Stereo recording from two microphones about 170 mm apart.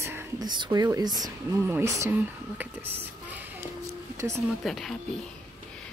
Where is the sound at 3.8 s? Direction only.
15° right (ahead or behind).